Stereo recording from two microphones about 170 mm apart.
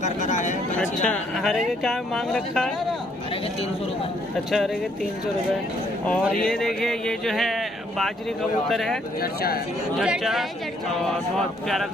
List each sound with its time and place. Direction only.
0.0 s speech: 45° left (ahead or behind)
0.7 s speech: 5° left (ahead or behind)
6.4 s speech: centre (ahead or behind)
8.6 s speech: centre (ahead or behind)
9.2 s speech: 60° left (ahead or behind)
9.9 s speech: centre (ahead or behind)